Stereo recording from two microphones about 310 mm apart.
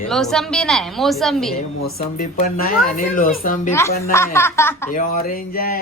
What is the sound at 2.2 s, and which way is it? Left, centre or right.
Speech, left.